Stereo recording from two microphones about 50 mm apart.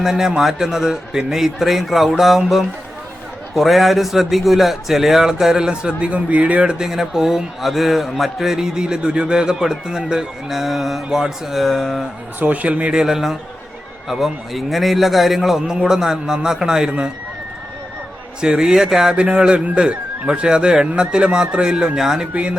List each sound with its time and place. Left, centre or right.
0.0 s a man's voice: centre
3.5 s a man's voice: centre
6.1 s a man's voice: right
6.8 s a man's voice: centre
12.6 s a man's voice: right
18.3 s a man's voice: centre
19.1 s a man's voice: right
22.3 s a man's voice: right